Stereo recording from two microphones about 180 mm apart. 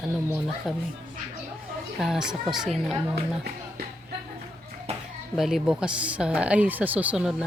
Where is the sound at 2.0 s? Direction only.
5° right (ahead or behind).